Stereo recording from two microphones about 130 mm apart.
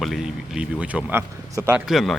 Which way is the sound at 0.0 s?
5° right (ahead or behind).